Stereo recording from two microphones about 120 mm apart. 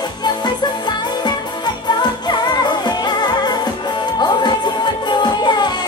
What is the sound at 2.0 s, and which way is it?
Music, 35° left (ahead or behind).